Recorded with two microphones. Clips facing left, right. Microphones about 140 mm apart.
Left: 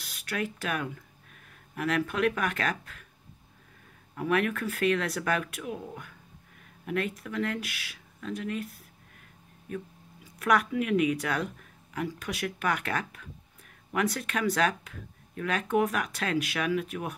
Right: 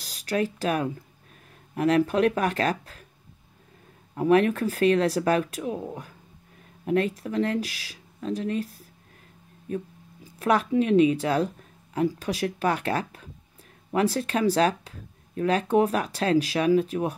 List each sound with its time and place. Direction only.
0.0 s speech: 35° right (ahead or behind)
4.1 s speech: 30° right (ahead or behind)